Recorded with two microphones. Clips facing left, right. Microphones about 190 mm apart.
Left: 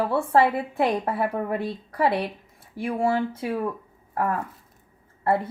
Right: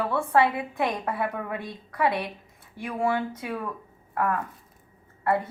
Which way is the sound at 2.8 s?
30° left (ahead or behind).